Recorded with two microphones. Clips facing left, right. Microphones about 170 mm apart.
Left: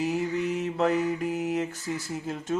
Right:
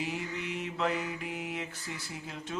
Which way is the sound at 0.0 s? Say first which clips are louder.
Left 9 dB; 40° left (ahead or behind).